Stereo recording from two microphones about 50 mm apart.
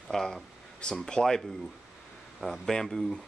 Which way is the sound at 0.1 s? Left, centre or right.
Centre.